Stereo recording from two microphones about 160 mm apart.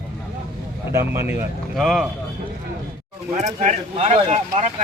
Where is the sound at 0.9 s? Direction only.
15° right (ahead or behind).